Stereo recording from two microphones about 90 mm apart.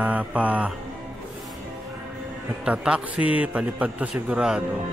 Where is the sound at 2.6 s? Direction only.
10° right (ahead or behind).